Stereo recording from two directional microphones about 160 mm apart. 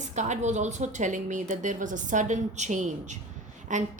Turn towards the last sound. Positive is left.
turn(degrees=-50)  # may be behind; listen again after turning